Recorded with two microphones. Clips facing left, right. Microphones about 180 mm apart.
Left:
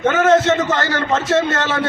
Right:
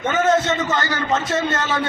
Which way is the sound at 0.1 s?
90° left.